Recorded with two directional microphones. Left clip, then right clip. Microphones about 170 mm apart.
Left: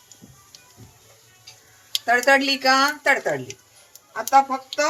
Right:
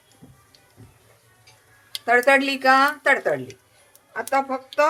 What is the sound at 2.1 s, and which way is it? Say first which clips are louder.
A woman's voice: even; 25° right (ahead or behind).